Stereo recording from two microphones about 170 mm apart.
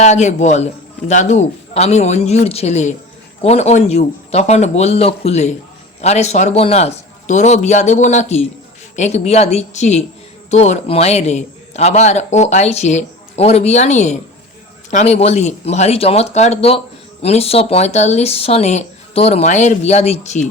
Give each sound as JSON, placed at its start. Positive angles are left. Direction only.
{"t": 0.0, "sound": "a man's voice", "side_deg": 45}